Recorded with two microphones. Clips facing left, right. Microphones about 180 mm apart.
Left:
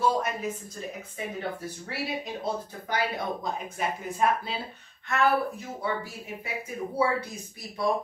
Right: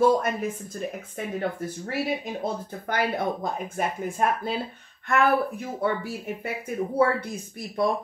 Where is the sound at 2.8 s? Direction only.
50° right (ahead or behind).